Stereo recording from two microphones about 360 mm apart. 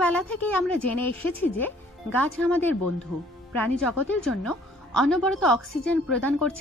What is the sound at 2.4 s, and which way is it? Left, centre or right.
Speech, centre.